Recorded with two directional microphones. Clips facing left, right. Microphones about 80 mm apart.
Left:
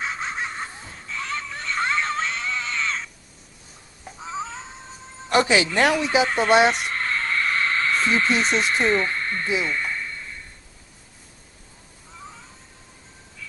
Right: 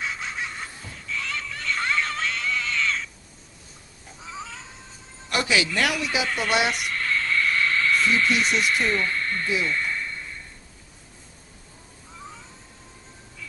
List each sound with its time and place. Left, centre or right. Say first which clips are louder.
0.0 s a sound: left 3 dB; left
4.2 s cat: left 6 dB; left
5.3 s speech: left 5 dB; left